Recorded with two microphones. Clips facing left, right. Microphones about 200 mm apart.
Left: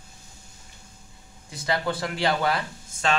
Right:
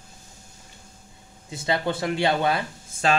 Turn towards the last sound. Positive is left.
turn(degrees=-30)  # may be behind; listen again after turning